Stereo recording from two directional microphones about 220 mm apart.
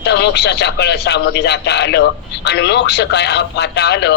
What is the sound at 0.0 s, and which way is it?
Speech, 50° left (ahead or behind).